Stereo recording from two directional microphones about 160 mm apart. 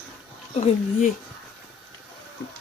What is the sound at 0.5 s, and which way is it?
Speech, 45° left (ahead or behind).